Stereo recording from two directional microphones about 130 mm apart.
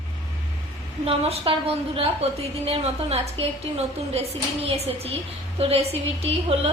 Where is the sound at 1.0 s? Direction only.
50° right (ahead or behind).